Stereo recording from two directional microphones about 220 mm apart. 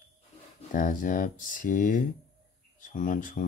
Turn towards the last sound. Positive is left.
turn(degrees=35)  # may be behind; listen again after turning